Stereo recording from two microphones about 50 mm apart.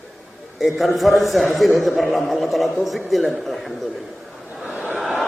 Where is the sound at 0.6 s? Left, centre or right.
Centre.